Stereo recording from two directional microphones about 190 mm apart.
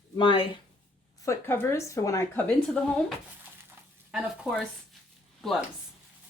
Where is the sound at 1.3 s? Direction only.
10° left (ahead or behind).